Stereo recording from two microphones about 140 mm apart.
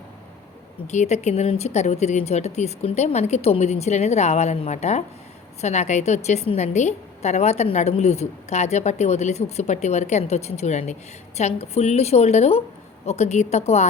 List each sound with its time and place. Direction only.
0.9 s a woman's voice: 55° left (ahead or behind)